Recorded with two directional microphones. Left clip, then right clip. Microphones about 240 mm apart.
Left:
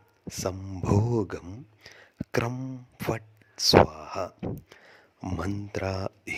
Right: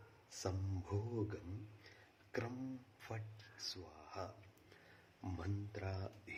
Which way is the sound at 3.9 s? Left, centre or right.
Left.